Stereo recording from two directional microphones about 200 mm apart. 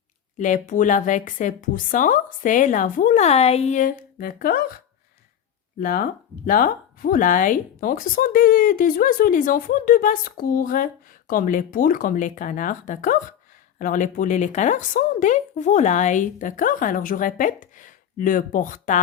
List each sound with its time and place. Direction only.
0.3 s speech: 40° left (ahead or behind)
5.8 s speech: 45° left (ahead or behind)